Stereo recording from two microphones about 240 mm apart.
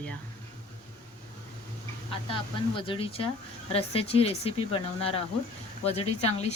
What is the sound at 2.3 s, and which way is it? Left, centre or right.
Speech, left.